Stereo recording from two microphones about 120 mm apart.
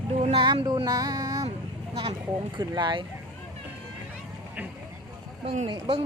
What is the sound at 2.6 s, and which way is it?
Speech, 40° right (ahead or behind).